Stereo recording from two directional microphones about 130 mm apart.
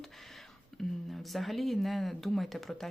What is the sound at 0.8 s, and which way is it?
Speech, centre (ahead or behind).